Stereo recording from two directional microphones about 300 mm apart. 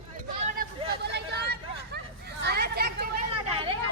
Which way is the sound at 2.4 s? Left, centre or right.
Right.